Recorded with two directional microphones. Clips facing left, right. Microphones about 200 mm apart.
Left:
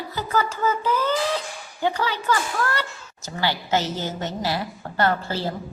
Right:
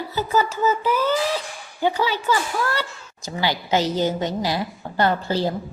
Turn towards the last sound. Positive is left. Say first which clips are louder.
# right 3 dB
turn(degrees=-15)  # may be behind; listen again after turning